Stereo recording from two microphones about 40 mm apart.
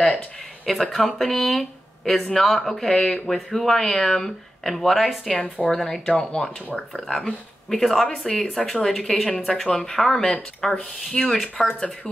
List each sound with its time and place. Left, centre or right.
0.7 s speech: centre
5.4 s a woman's voice: left
5.8 s speech: centre
6.1 s a woman's voice: left
6.7 s speech: centre
11.2 s a woman's voice: left